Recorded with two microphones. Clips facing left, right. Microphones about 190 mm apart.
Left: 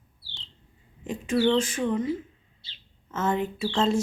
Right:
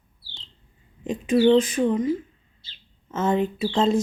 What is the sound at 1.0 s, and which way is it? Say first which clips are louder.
Speech: right 5 dB; 20° right (ahead or behind).